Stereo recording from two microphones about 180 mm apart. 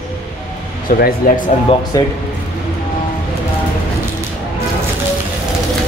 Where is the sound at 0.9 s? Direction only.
55° left (ahead or behind).